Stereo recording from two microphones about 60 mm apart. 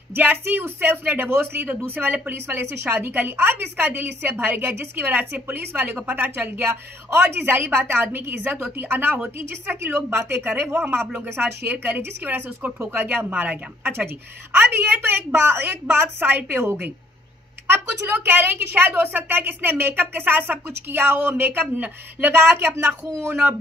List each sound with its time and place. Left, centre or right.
0.1 s a woman's voice: right
18.0 s a woman's voice: right
21.7 s speech: right
22.3 s speech: right